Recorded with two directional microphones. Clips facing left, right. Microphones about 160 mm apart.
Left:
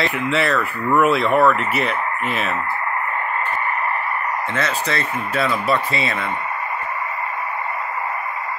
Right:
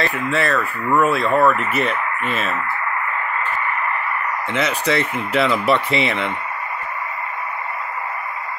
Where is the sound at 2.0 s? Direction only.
30° left (ahead or behind).